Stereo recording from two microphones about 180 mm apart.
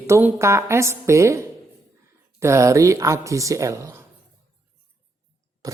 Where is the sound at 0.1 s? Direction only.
10° right (ahead or behind).